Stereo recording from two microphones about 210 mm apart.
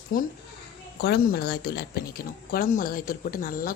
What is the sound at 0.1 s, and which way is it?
Speech, 40° left (ahead or behind).